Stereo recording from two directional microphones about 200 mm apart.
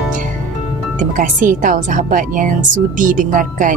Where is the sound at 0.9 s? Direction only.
40° right (ahead or behind).